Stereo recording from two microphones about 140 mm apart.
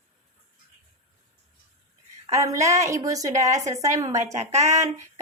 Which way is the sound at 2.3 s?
25° right (ahead or behind).